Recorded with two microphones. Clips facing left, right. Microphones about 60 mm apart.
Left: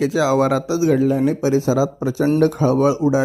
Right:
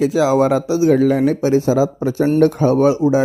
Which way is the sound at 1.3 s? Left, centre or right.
Right.